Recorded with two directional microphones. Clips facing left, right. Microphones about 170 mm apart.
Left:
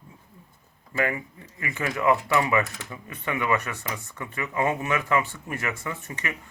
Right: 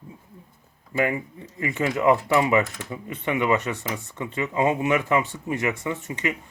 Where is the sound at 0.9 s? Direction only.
20° right (ahead or behind).